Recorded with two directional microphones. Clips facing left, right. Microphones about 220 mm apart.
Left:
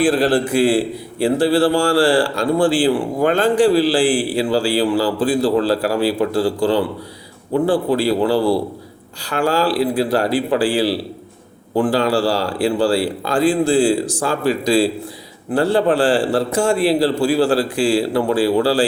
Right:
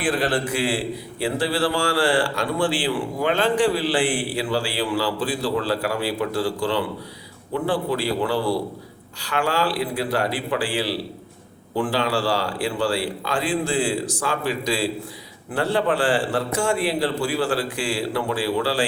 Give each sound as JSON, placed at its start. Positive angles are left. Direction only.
{"t": 0.1, "sound": "a man's voice", "side_deg": 35}
{"t": 1.2, "sound": "a man's voice", "side_deg": 45}
{"t": 2.0, "sound": "a man's voice", "side_deg": 35}
{"t": 3.8, "sound": "a man's voice", "side_deg": 30}